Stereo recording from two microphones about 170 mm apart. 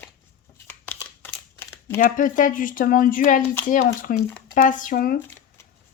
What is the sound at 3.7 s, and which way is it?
Speech, 55° left (ahead or behind).